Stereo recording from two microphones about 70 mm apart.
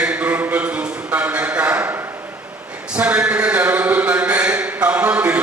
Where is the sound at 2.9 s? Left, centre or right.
Centre.